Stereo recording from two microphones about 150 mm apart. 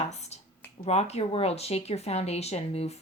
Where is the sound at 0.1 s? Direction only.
45° left (ahead or behind).